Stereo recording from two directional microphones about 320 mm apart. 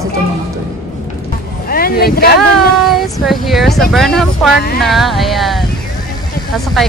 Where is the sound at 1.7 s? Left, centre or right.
Left.